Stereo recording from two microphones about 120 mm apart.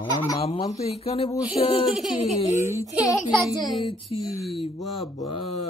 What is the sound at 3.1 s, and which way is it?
Speech, 30° left (ahead or behind).